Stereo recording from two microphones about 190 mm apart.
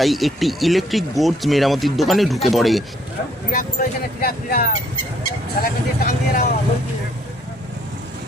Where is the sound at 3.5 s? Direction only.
50° left (ahead or behind).